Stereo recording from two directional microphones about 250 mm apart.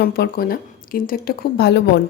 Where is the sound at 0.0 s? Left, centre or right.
Left.